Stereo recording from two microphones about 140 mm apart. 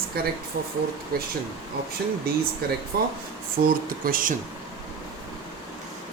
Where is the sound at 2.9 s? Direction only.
90° right.